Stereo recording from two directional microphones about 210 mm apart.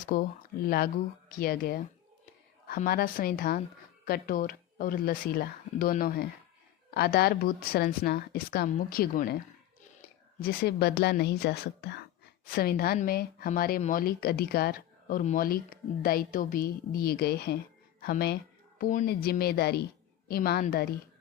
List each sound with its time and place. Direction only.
0.1 s speech: 45° left (ahead or behind)
10.4 s speech: 50° left (ahead or behind)